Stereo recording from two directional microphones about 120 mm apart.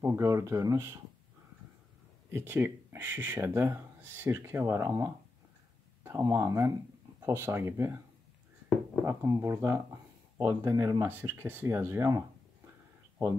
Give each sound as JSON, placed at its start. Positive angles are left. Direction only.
{"t": 0.0, "sound": "speech", "side_deg": -25}
{"t": 2.3, "sound": "speech", "side_deg": -20}
{"t": 9.0, "sound": "speech", "side_deg": -20}
{"t": 11.0, "sound": "speech", "side_deg": -15}